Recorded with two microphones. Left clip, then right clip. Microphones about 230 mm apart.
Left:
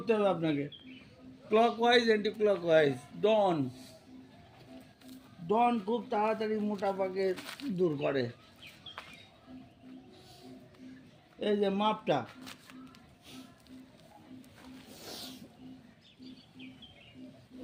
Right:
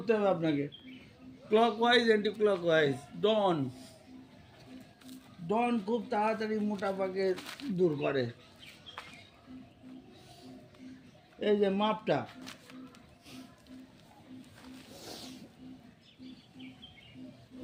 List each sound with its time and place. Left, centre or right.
0.0 s a man's voice: centre
5.0 s speech: centre
7.3 s speech: centre
7.8 s a man's voice: centre
11.3 s a man's voice: centre
15.0 s music: centre